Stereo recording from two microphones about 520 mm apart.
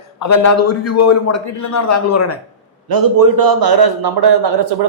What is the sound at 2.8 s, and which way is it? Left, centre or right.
A man's voice, right.